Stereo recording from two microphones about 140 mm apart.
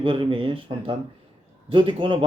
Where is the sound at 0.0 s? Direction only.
35° right (ahead or behind).